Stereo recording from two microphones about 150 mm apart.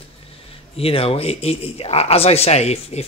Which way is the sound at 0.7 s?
40° left (ahead or behind).